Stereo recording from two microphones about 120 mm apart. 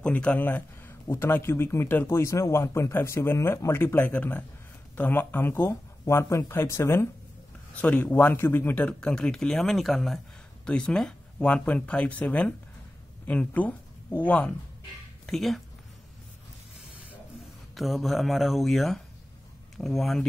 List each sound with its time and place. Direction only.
0.0 s speech: 10° left (ahead or behind)
15.2 s speech: centre (ahead or behind)
17.7 s speech: centre (ahead or behind)